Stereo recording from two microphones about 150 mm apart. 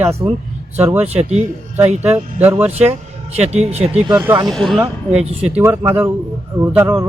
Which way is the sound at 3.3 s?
45° right (ahead or behind).